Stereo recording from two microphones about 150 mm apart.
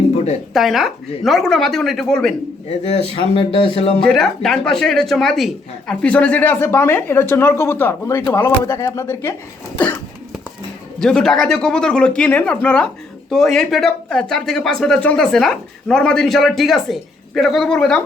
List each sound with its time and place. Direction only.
0.5 s speech: centre (ahead or behind)
2.9 s speech: 40° left (ahead or behind)
4.0 s speech: centre (ahead or behind); by 9.3 s 20° left (ahead or behind)
9.7 s cough: 10° left (ahead or behind)
11.0 s speech: 5° left (ahead or behind)